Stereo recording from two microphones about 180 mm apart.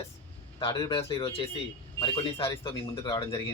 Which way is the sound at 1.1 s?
30° left (ahead or behind).